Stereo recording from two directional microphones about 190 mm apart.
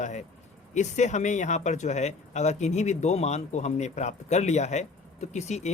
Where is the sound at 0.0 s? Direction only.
40° left (ahead or behind).